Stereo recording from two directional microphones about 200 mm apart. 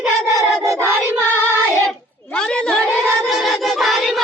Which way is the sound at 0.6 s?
15° right (ahead or behind).